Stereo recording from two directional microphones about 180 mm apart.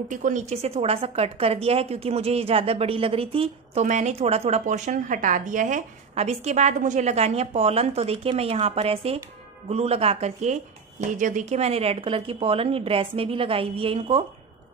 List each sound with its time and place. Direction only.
0.1 s speech: 45° right (ahead or behind)
3.8 s speech: 40° right (ahead or behind)